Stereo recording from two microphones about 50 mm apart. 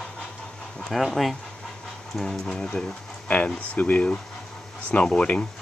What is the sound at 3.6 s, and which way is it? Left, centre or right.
Speech, left.